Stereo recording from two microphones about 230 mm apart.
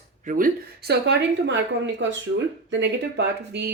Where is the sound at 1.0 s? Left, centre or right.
Right.